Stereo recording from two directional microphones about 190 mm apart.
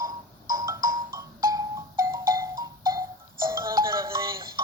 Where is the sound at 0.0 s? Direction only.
20° right (ahead or behind).